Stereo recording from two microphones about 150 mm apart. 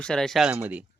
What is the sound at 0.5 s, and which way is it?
Speech, 10° right (ahead or behind).